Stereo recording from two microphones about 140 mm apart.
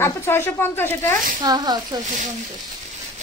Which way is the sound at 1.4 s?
30° right (ahead or behind).